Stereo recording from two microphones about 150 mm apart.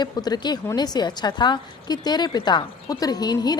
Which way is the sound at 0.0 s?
30° left (ahead or behind).